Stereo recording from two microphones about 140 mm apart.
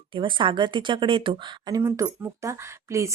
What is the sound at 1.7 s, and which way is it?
Speech, 20° right (ahead or behind).